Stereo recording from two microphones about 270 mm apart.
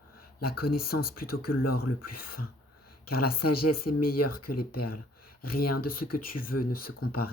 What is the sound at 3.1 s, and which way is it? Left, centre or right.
Speech, left.